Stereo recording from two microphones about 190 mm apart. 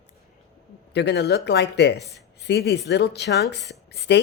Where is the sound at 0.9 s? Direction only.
60° left (ahead or behind).